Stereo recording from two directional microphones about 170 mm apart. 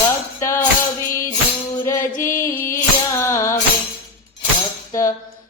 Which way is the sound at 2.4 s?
15° left (ahead or behind).